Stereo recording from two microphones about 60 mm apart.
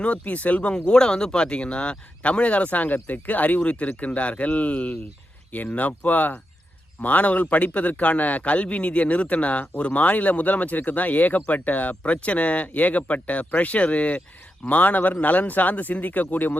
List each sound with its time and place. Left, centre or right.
0.0 s a man's voice: left
0.7 s a man's voice: centre; by 16.6 s left